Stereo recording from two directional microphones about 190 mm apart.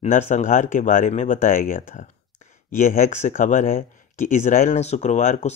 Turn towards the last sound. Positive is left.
turn(degrees=40)  # may be behind; listen again after turning